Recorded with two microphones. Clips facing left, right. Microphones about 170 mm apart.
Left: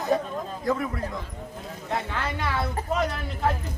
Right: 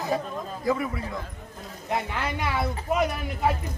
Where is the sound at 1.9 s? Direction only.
15° right (ahead or behind).